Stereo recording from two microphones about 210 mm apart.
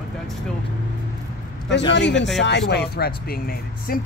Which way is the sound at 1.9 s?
55° left (ahead or behind).